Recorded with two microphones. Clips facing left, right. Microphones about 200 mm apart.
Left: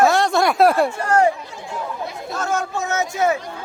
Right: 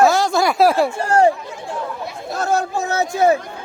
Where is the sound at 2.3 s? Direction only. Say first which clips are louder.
Right 4 dB; 35° right (ahead or behind).